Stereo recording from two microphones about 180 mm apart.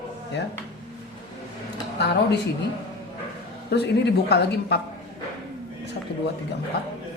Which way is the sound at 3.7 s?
65° left (ahead or behind).